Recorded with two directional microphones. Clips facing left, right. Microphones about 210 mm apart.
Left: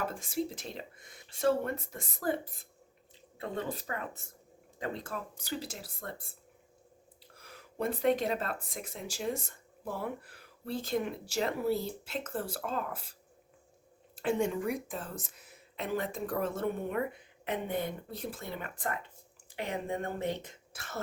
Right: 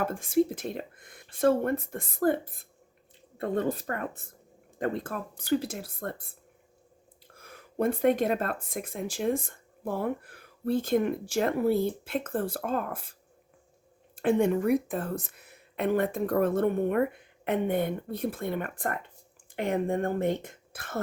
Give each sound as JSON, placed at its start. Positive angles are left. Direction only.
{"t": 0.0, "sound": "speech", "side_deg": -55}
{"t": 7.3, "sound": "speech", "side_deg": -50}
{"t": 14.2, "sound": "speech", "side_deg": -55}